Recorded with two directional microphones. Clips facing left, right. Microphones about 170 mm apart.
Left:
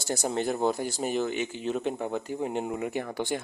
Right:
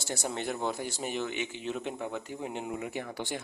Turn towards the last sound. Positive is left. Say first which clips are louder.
# left 6 dB
turn(degrees=50)  # may be behind; listen again after turning